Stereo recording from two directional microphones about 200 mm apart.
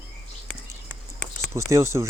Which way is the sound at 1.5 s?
15° right (ahead or behind).